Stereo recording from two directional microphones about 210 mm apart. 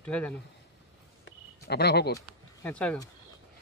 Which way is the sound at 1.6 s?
50° left (ahead or behind).